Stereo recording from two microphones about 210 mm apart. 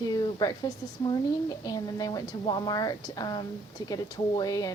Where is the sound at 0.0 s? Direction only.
20° left (ahead or behind).